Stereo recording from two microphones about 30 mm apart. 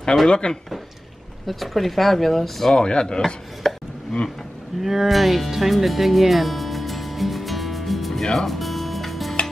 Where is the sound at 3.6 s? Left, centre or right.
Centre.